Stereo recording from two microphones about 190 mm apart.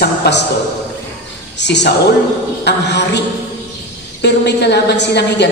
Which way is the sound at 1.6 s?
65° left (ahead or behind).